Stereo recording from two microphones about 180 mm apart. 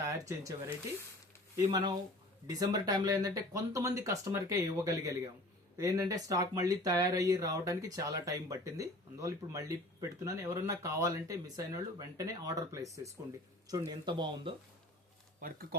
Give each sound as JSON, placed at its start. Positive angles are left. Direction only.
{"t": 0.1, "sound": "speech", "side_deg": -15}
{"t": 1.5, "sound": "speech", "side_deg": -20}
{"t": 15.4, "sound": "speech", "side_deg": -50}